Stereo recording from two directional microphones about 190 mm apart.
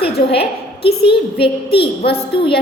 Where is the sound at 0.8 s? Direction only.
30° left (ahead or behind).